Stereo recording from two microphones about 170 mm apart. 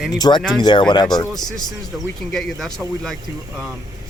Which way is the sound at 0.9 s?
25° left (ahead or behind).